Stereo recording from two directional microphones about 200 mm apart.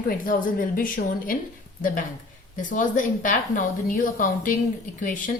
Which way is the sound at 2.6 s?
40° left (ahead or behind).